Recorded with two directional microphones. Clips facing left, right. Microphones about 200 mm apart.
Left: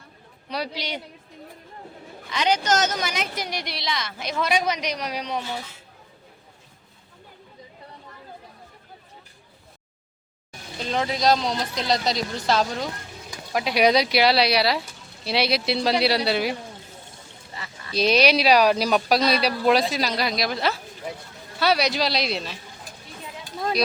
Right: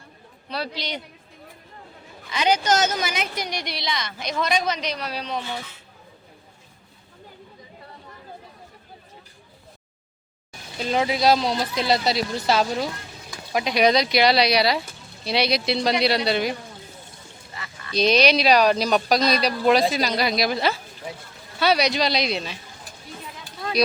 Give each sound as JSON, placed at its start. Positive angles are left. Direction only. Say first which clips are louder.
{"t": 0.4, "sound": "a man's voice", "louder": "even", "side_deg": 15}
{"t": 2.3, "sound": "speech", "louder": "right 1 dB", "side_deg": -5}
{"t": 10.8, "sound": "speech", "louder": "right 3 dB", "side_deg": -10}
{"t": 17.5, "sound": "a sound", "louder": "left 1 dB", "side_deg": 35}
{"t": 17.9, "sound": "speech", "louder": "right 1 dB", "side_deg": 5}